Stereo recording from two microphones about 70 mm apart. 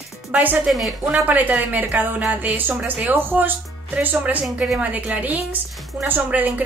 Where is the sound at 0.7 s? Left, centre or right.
Centre.